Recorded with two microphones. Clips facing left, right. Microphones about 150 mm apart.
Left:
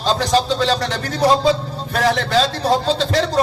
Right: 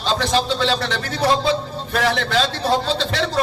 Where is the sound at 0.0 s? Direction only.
40° left (ahead or behind).